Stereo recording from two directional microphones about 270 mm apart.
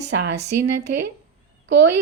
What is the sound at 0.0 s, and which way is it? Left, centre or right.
Speech, right.